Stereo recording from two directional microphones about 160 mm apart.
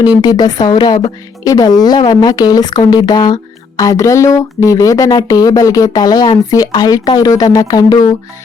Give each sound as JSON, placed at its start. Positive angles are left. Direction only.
{"t": 0.2, "sound": "speech", "side_deg": 25}